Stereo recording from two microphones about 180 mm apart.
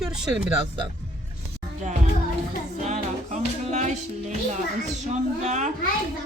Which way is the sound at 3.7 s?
40° right (ahead or behind).